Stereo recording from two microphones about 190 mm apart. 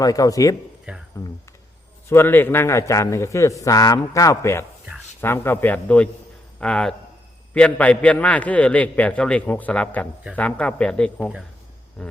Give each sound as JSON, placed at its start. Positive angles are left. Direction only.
{"t": 0.0, "sound": "speech", "side_deg": 20}
{"t": 0.9, "sound": "speech", "side_deg": -5}
{"t": 2.0, "sound": "a man's voice", "side_deg": 10}